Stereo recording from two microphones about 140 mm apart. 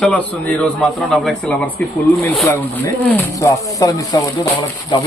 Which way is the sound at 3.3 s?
20° left (ahead or behind).